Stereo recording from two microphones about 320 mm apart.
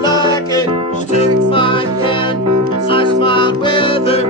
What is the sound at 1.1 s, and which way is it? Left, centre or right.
Music, centre.